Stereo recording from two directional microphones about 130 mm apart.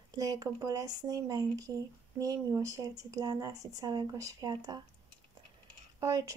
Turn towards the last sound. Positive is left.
turn(degrees=-25)  # may be behind; listen again after turning